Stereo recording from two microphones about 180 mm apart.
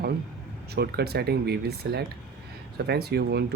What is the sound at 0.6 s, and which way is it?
Speech, 60° right (ahead or behind).